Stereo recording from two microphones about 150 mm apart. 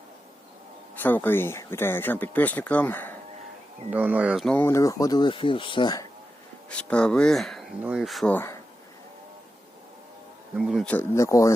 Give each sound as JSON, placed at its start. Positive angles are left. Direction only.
{"t": 1.0, "sound": "speech", "side_deg": 10}
{"t": 3.9, "sound": "speech", "side_deg": -10}
{"t": 4.4, "sound": "speech", "side_deg": 15}
{"t": 6.7, "sound": "speech", "side_deg": 5}
{"t": 8.3, "sound": "speech", "side_deg": 15}
{"t": 10.6, "sound": "speech", "side_deg": 0}
{"t": 10.9, "sound": "speech", "side_deg": 20}